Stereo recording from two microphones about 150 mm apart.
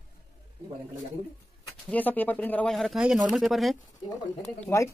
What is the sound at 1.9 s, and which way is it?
Speech, 10° left (ahead or behind).